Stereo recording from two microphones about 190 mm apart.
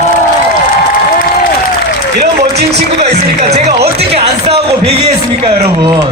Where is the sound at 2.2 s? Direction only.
60° right (ahead or behind).